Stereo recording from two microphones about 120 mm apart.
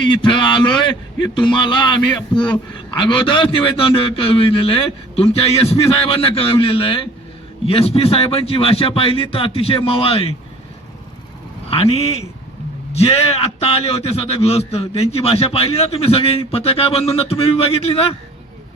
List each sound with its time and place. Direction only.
0.0 s a man's voice: 40° left (ahead or behind)
11.7 s a man's voice: 50° left (ahead or behind)